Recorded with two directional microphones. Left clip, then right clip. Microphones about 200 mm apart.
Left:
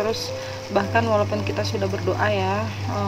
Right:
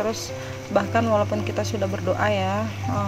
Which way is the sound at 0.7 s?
30° right (ahead or behind).